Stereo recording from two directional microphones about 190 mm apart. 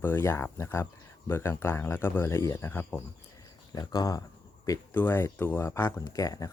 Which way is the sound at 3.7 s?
20° left (ahead or behind).